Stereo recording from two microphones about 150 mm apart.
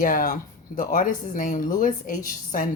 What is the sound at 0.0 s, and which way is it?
Speech, 70° left (ahead or behind).